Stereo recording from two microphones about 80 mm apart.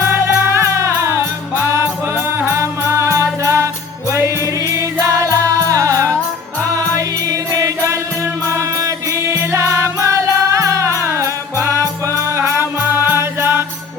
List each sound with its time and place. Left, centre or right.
0.0 s music: right
4.8 s music: right
7.3 s music: right